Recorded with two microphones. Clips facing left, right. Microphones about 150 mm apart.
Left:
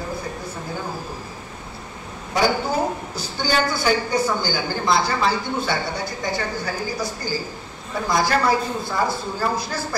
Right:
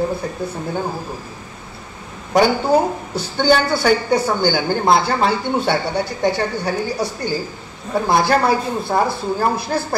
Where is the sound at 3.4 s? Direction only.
60° right (ahead or behind).